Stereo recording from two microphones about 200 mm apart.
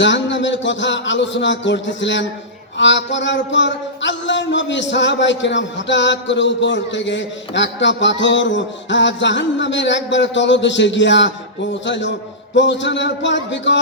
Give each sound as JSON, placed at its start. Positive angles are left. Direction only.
{"t": 0.0, "sound": "music", "side_deg": 65}